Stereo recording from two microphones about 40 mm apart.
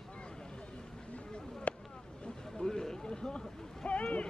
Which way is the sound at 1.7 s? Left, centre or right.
Left.